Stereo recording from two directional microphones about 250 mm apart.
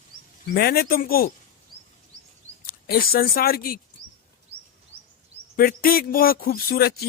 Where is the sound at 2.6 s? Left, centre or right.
Left.